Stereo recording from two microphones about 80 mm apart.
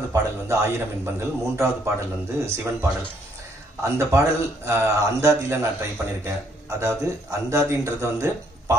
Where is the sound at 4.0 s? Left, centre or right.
Right.